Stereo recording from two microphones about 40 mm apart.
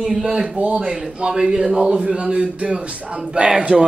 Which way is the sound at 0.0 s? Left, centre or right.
Centre.